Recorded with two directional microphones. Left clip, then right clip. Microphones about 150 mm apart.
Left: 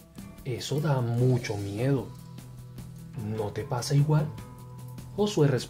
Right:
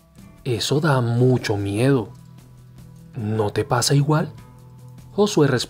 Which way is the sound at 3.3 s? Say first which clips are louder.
Right 11 dB; 60° right (ahead or behind).